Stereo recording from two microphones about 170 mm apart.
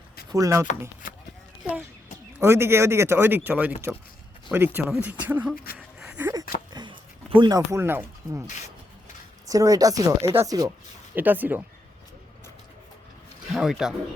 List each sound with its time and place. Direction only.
0.3 s speech: 20° right (ahead or behind)
2.4 s speech: 15° right (ahead or behind)
5.7 s a sound: 5° right (ahead or behind)
6.7 s a sound: 30° right (ahead or behind)
9.5 s speech: 20° right (ahead or behind)
11.1 s speech: 10° right (ahead or behind)
13.5 s speech: 5° right (ahead or behind)